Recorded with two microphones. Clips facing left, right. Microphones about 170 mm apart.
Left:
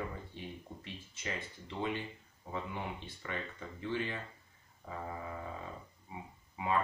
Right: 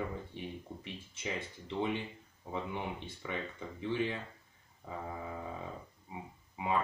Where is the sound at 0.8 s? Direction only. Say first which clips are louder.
Right 2 dB; 20° right (ahead or behind).